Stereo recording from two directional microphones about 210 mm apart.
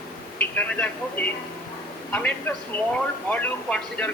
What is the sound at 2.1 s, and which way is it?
Speech, 10° left (ahead or behind).